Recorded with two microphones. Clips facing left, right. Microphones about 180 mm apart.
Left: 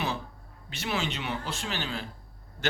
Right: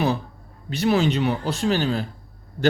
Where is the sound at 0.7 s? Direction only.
40° right (ahead or behind).